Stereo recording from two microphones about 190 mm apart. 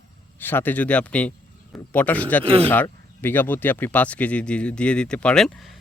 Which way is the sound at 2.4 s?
30° right (ahead or behind).